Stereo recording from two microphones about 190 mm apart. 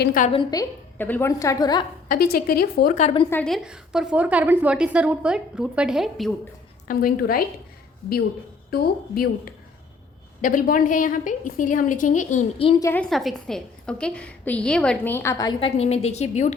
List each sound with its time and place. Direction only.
0.0 s a woman's voice: 50° left (ahead or behind)
0.3 s a woman's voice: 25° left (ahead or behind)
2.0 s a woman's voice: 50° left (ahead or behind); by 3.2 s 35° left (ahead or behind)
3.2 s a woman's voice: 5° left (ahead or behind)
6.8 s a woman's voice: 50° left (ahead or behind)
8.7 s a woman's voice: 50° left (ahead or behind); by 12.8 s 30° left (ahead or behind)
12.8 s a woman's voice: 10° left (ahead or behind); by 16.6 s 35° left (ahead or behind)